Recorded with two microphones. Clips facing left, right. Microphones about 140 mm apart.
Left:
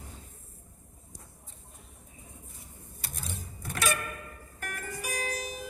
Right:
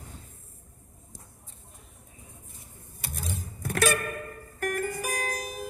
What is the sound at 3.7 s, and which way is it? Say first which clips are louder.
Music: right 6 dB; 55° right (ahead or behind).